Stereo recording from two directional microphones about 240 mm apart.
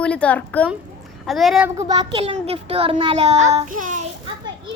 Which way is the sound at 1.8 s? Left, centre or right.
Centre.